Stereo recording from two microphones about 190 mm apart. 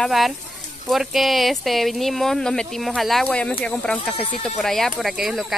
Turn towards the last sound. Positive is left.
turn(degrees=0)  # may be behind; listen again after turning